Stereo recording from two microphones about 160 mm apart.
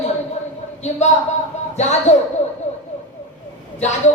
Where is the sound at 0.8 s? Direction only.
45° left (ahead or behind).